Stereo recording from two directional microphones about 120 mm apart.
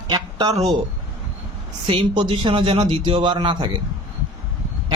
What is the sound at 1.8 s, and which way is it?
A man's voice, 45° right (ahead or behind).